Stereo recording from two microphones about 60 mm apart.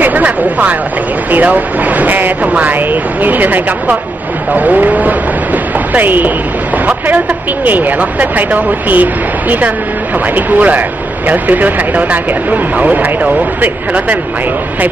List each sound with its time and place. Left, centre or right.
0.0 s speech: right
7.6 s speech: right